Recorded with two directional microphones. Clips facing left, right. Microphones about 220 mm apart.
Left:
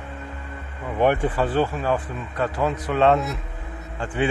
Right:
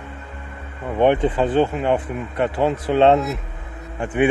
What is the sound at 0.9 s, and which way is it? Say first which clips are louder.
Speech: right 4 dB; 20° right (ahead or behind).